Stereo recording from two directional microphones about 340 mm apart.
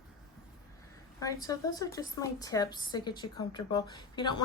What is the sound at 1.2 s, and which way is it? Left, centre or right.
A woman's voice, centre.